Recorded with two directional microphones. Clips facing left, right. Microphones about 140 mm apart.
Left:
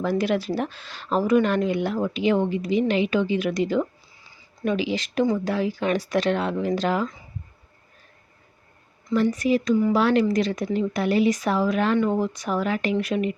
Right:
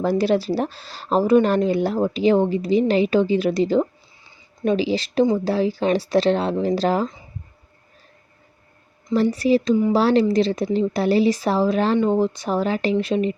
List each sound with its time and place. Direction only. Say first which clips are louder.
0.0 s speech: right 4 dB; 35° right (ahead or behind)
9.1 s speech: right 3 dB; 30° right (ahead or behind)